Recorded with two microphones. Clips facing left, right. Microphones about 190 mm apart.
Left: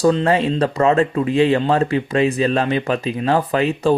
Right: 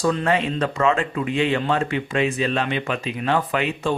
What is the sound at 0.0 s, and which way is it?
Speech, 30° left (ahead or behind).